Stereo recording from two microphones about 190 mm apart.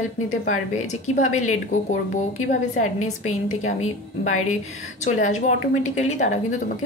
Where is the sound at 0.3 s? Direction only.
40° left (ahead or behind).